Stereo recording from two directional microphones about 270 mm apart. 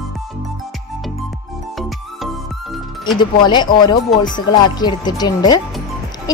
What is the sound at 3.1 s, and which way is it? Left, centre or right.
A woman's voice, centre.